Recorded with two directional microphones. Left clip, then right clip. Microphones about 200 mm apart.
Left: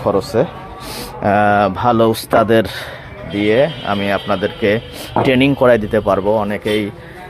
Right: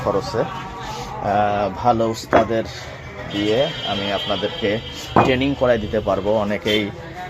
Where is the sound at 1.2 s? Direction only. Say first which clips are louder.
Left 6 dB; 55° left (ahead or behind).